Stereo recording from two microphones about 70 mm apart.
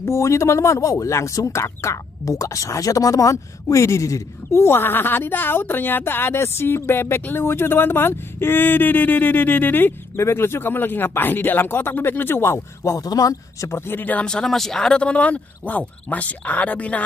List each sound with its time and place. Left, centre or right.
0.0 s speech: left
10.1 s speech: left
13.0 s speech: left
14.2 s speech: centre